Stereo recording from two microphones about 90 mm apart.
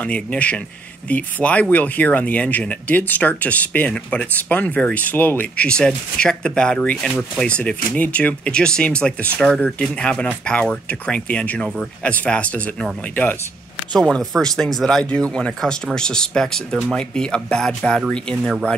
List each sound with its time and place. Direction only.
0.0 s speech: 15° left (ahead or behind)
13.9 s speech: 5° left (ahead or behind)